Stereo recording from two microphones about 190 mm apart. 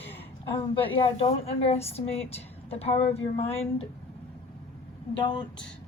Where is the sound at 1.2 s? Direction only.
35° left (ahead or behind).